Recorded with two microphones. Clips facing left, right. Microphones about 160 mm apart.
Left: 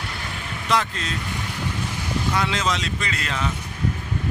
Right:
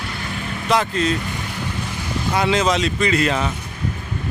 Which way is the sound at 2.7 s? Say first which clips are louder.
Right 8 dB; 15° right (ahead or behind).